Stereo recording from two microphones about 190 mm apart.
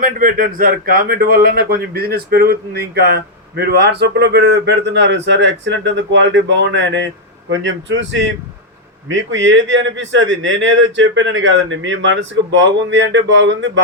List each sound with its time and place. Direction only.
0.0 s a man's voice: 45° right (ahead or behind); by 13.8 s 70° right (ahead or behind)